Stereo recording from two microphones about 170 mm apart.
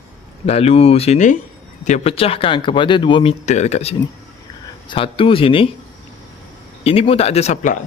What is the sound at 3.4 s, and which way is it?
Speech, 40° left (ahead or behind).